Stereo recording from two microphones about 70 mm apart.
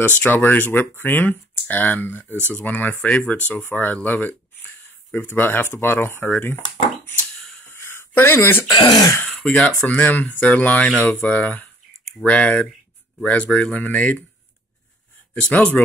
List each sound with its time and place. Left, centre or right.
0.1 s speech: left
7.7 s a sound: left
8.6 s speech: left
9.4 s speech: centre
15.5 s speech: centre